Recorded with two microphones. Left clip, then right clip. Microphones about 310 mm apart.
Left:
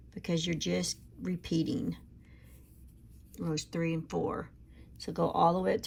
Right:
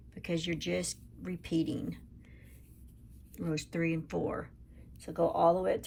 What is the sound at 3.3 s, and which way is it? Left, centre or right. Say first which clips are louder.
Speech: even; centre.